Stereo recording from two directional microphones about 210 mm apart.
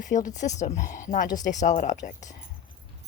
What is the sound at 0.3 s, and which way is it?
Speech, 35° left (ahead or behind).